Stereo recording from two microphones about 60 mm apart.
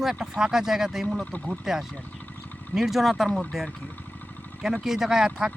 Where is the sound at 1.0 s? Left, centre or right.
Left.